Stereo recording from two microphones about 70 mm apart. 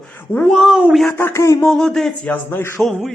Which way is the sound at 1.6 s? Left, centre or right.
Centre.